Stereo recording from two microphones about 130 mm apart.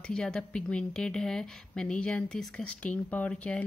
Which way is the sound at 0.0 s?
5° left (ahead or behind).